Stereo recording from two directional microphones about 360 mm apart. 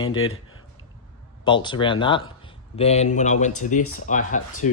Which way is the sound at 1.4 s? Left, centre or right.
Centre.